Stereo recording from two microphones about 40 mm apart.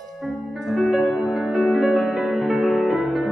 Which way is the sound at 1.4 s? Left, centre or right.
Right.